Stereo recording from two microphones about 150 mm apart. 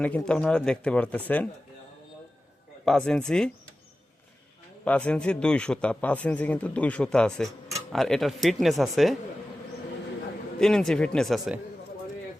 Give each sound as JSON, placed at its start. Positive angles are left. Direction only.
{"t": 0.0, "sound": "a man's voice", "side_deg": 10}
{"t": 2.8, "sound": "speech", "side_deg": 5}
{"t": 4.9, "sound": "a man's voice", "side_deg": 5}
{"t": 10.6, "sound": "speech", "side_deg": 5}